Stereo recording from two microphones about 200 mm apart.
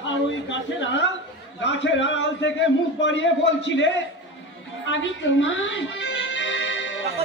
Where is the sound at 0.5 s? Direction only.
65° left (ahead or behind).